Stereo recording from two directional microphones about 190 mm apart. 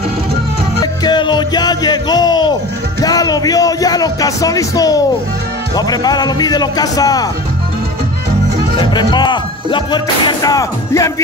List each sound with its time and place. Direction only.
1.0 s music: 25° left (ahead or behind)
3.0 s speech: 20° left (ahead or behind)
8.7 s music: 25° left (ahead or behind)